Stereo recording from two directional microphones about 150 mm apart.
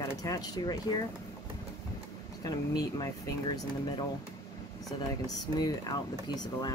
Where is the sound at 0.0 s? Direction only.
25° left (ahead or behind).